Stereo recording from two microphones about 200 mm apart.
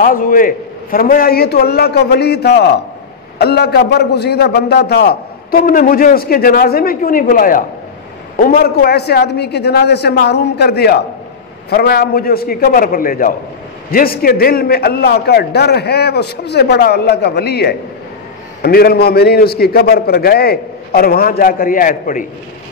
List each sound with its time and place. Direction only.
0.0 s a man's voice: 45° left (ahead or behind)